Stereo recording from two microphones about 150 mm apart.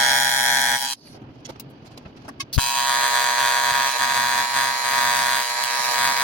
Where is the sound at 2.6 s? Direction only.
5° left (ahead or behind).